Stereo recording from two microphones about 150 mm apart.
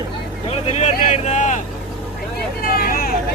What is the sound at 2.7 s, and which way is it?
Vehicle, 80° left.